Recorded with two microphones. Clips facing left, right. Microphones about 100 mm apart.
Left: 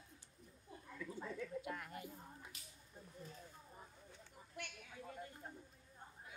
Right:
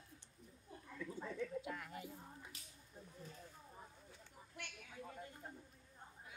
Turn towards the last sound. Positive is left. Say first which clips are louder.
# left 1 dB
turn(degrees=0)  # may be behind; listen again after turning